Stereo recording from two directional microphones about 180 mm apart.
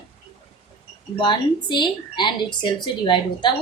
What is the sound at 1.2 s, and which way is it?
Speech, 25° left (ahead or behind).